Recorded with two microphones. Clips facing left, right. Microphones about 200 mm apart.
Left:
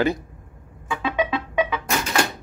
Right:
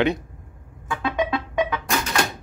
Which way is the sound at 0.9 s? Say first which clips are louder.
Even; 5° left (ahead or behind).